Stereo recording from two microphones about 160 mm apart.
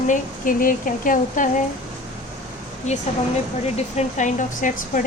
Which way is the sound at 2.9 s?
45° left (ahead or behind).